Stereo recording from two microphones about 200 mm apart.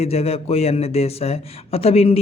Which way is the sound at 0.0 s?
30° left (ahead or behind).